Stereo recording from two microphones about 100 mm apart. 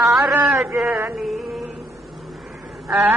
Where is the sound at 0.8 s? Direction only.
20° right (ahead or behind).